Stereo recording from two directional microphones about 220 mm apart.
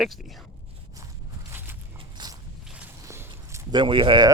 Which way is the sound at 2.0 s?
20° right (ahead or behind).